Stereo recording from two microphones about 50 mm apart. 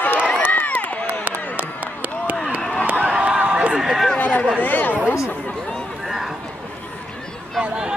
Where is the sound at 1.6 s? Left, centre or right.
Right.